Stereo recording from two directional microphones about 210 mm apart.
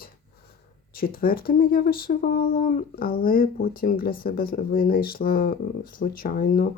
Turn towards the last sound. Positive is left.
turn(degrees=45)  # may be behind; listen again after turning